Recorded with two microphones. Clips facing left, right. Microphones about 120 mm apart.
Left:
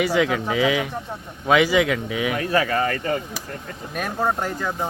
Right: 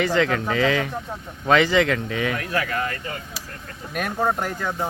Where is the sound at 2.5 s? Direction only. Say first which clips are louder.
Left 5 dB; 40° left (ahead or behind).